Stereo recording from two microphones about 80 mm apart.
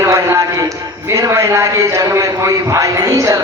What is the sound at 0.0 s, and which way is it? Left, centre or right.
Music, right.